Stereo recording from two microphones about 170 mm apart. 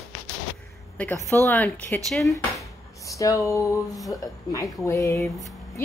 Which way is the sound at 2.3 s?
20° left (ahead or behind).